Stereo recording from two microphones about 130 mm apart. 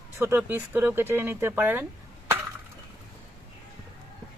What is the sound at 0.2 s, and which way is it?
Speech, 15° right (ahead or behind).